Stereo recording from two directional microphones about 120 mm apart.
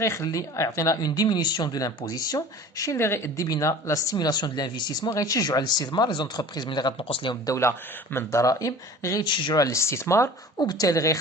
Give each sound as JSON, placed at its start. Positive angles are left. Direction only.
{"t": 0.0, "sound": "a woman's voice", "side_deg": 25}
{"t": 7.4, "sound": "speech", "side_deg": 25}